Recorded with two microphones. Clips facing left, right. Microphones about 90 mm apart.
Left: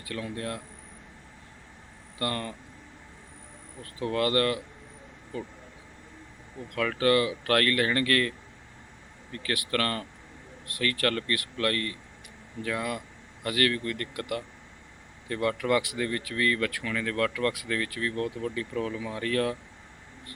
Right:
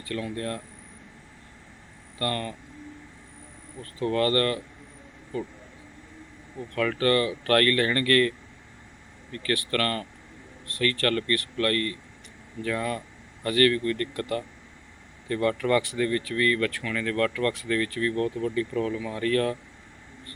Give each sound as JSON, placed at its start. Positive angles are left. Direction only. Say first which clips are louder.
{"t": 0.0, "sound": "speech", "louder": "right 3 dB", "side_deg": 15}
{"t": 2.1, "sound": "speech", "louder": "right 2 dB", "side_deg": 15}
{"t": 4.0, "sound": "speech", "louder": "right 2 dB", "side_deg": 15}
{"t": 6.7, "sound": "speech", "louder": "right 1 dB", "side_deg": 5}
{"t": 9.3, "sound": "speech", "louder": "right 3 dB", "side_deg": 10}